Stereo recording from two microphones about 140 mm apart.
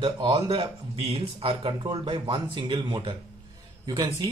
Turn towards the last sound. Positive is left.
turn(degrees=-30)  # may be behind; listen again after turning